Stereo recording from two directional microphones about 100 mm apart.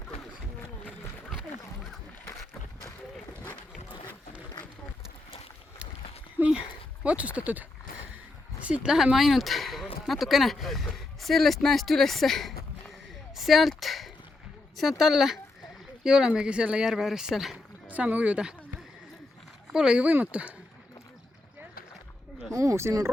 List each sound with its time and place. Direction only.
6.3 s speech: 15° right (ahead or behind); by 12.5 s centre (ahead or behind)
13.3 s a sound: centre (ahead or behind)
14.8 s speech: centre (ahead or behind)
17.8 s speech: 15° right (ahead or behind)
19.7 s speech: 5° right (ahead or behind)
22.5 s speech: 30° right (ahead or behind)